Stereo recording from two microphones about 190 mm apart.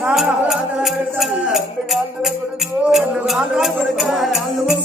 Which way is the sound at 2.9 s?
Centre (ahead or behind).